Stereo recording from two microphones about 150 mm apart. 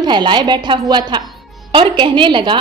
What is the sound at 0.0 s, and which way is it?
A woman's voice, 30° right (ahead or behind).